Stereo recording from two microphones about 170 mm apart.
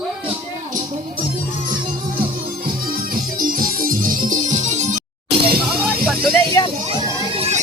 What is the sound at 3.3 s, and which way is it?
Music, 55° right (ahead or behind).